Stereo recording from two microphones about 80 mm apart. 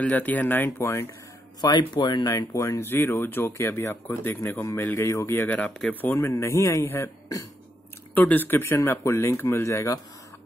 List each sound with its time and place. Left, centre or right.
0.0 s speech: left
1.6 s speech: left
2.3 s speech: left
2.9 s speech: left
5.6 s speech: centre
6.3 s speech: left
8.1 s speech: left